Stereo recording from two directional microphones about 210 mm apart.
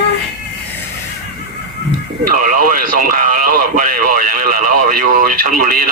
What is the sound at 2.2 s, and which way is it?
Speech, 40° right (ahead or behind).